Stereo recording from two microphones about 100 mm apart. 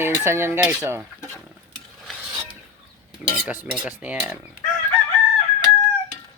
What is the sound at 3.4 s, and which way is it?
Chicken, 10° right (ahead or behind).